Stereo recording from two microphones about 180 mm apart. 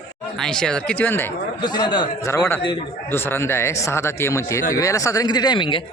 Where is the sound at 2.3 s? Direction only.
15° left (ahead or behind).